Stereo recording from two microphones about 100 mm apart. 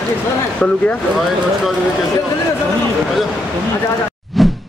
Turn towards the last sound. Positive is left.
turn(degrees=0)  # may be behind; listen again after turning